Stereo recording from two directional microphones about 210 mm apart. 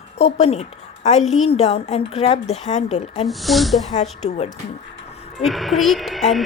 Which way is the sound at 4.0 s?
30° left (ahead or behind).